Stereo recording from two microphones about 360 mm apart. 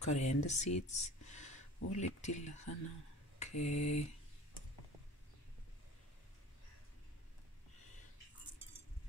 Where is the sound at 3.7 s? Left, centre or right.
Left.